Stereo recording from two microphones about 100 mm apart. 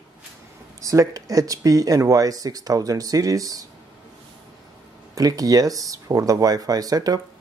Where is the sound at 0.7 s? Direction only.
30° right (ahead or behind).